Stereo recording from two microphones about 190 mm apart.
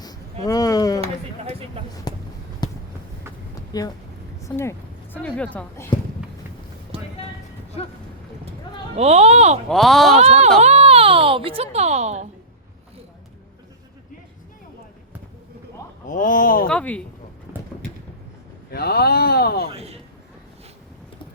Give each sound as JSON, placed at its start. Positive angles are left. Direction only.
{"t": 0.4, "sound": "speech", "side_deg": 20}
{"t": 1.0, "sound": "a sound", "side_deg": -30}
{"t": 2.1, "sound": "a sound", "side_deg": 20}
{"t": 3.7, "sound": "speech", "side_deg": 20}
{"t": 6.9, "sound": "clip-clop", "side_deg": -30}
{"t": 9.0, "sound": "speech", "side_deg": -35}
{"t": 9.6, "sound": "speech", "side_deg": 0}
{"t": 10.2, "sound": "a child's voice", "side_deg": -35}
{"t": 16.0, "sound": "speech", "side_deg": 45}
{"t": 16.6, "sound": "speech", "side_deg": 5}
{"t": 17.5, "sound": "a sound", "side_deg": -10}
{"t": 18.7, "sound": "speech", "side_deg": 55}
{"t": 19.7, "sound": "speech", "side_deg": -30}